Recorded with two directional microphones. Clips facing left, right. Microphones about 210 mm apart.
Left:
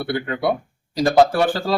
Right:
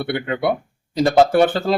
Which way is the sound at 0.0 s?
25° right (ahead or behind).